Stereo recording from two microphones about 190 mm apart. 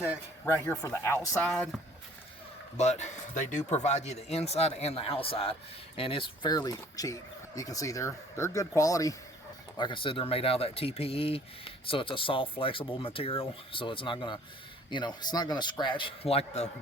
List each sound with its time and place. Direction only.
0.0 s speech: 15° left (ahead or behind)
1.5 s speech: 5° left (ahead or behind)
2.7 s speech: 35° left (ahead or behind)